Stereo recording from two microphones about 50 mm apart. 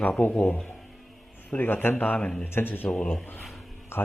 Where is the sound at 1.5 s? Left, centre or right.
Left.